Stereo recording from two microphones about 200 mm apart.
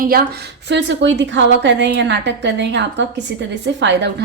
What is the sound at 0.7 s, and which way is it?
A woman's voice, 65° right (ahead or behind).